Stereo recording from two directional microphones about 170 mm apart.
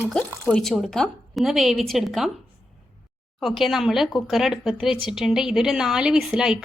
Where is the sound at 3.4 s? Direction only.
Centre (ahead or behind).